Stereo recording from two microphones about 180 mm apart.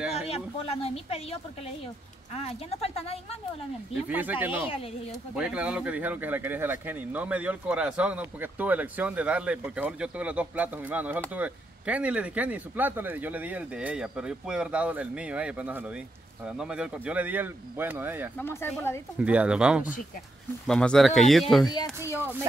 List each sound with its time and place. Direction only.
0.3 s speech: 35° left (ahead or behind)
3.9 s speech: 10° right (ahead or behind)
18.4 s speech: 15° left (ahead or behind)
19.2 s speech: 5° right (ahead or behind)